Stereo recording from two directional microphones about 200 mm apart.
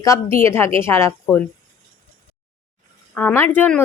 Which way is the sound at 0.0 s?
15° left (ahead or behind).